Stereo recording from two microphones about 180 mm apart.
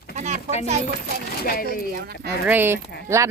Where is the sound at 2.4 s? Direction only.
10° right (ahead or behind).